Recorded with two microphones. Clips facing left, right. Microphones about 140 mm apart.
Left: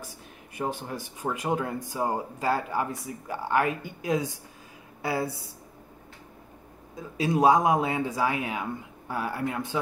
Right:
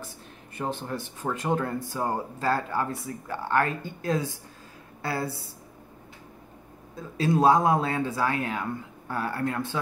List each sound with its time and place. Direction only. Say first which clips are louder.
0.6 s speech: even; 10° left (ahead or behind)
7.0 s speech: right 1 dB; 15° left (ahead or behind)